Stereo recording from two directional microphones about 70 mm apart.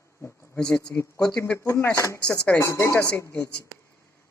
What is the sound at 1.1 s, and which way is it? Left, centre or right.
Speech, centre.